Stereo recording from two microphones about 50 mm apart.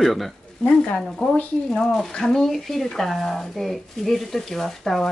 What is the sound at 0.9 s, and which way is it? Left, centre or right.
A woman's voice, centre.